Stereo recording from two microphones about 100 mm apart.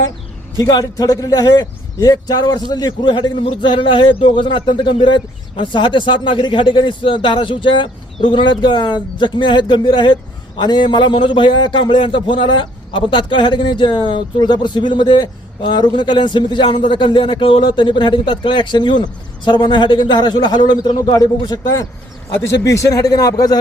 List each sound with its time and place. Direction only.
0.6 s a man's voice: 40° left (ahead or behind)
22.3 s a man's voice: 25° left (ahead or behind)